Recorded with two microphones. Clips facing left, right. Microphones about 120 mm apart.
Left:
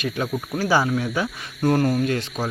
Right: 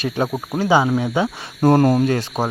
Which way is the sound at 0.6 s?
20° right (ahead or behind).